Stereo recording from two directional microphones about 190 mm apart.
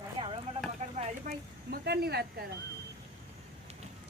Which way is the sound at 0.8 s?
35° right (ahead or behind).